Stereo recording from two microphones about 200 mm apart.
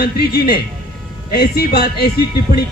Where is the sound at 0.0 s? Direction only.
50° left (ahead or behind).